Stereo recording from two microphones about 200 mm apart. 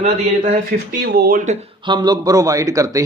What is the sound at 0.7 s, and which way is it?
Speech, 50° right (ahead or behind).